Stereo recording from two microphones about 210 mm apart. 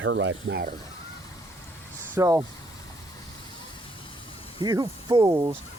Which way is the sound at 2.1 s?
15° right (ahead or behind).